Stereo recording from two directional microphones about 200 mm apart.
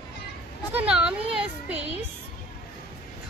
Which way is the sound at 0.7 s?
5° right (ahead or behind).